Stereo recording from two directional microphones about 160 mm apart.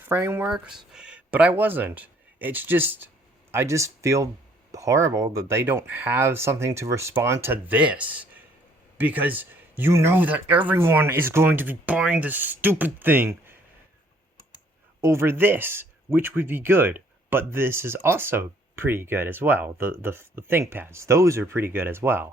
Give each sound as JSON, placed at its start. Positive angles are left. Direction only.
{"t": 0.0, "sound": "speech", "side_deg": -15}
{"t": 0.5, "sound": "speech", "side_deg": -5}
{"t": 15.0, "sound": "speech", "side_deg": -15}